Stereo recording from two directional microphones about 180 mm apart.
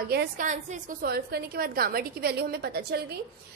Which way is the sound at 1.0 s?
60° right (ahead or behind).